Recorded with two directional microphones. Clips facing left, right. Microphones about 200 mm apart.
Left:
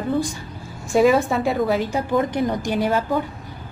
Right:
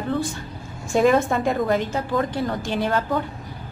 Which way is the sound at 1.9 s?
15° left (ahead or behind).